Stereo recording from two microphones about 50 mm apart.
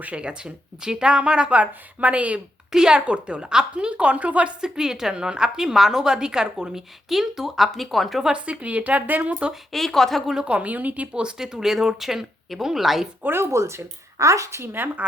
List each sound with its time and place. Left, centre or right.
0.0 s speech: right
2.7 s speech: centre
4.6 s a woman's voice: centre
8.3 s speech: right
9.7 s speech: centre
10.4 s speech: right
11.1 s a woman's voice: centre
13.2 s speech: right
13.5 s speech: right